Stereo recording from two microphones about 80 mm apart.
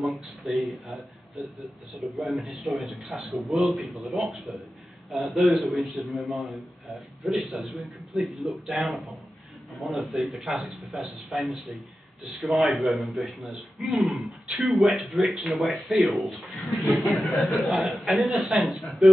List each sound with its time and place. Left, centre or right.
0.5 s a man's voice: centre
17.2 s a man's voice: centre
17.6 s a man's voice: centre